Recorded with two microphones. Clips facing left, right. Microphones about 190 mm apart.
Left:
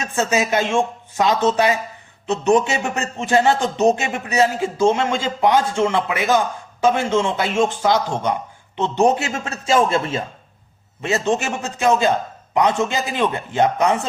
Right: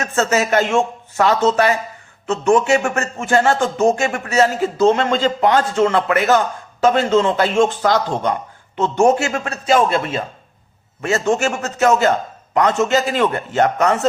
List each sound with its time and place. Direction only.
0.0 s speech: 15° left (ahead or behind)